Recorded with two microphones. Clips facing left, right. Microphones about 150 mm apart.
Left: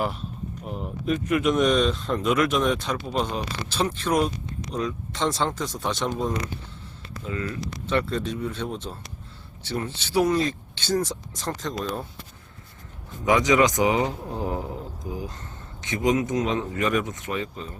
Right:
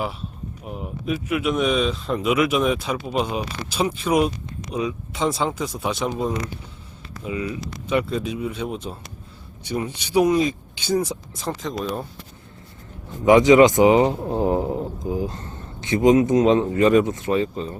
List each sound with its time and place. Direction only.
0.6 s speech: 5° right (ahead or behind)
13.2 s a man's voice: 25° right (ahead or behind)